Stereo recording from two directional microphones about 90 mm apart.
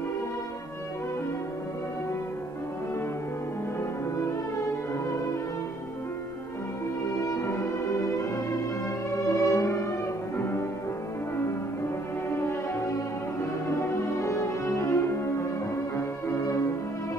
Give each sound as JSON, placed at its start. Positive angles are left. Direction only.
{"t": 7.2, "sound": "music", "side_deg": 35}
{"t": 12.3, "sound": "music", "side_deg": 25}
{"t": 14.2, "sound": "music", "side_deg": 35}